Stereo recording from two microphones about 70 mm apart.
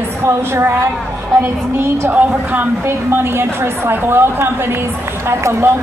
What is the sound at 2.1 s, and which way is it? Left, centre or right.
Speech, right.